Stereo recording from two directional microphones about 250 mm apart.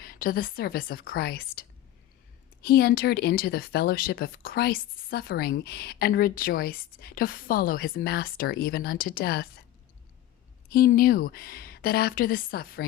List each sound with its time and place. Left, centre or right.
0.0 s speech: left
10.7 s speech: left